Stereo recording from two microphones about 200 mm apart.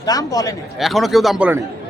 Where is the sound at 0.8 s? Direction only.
Centre (ahead or behind).